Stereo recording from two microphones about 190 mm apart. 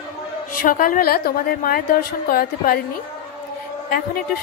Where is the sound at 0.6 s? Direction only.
50° left (ahead or behind).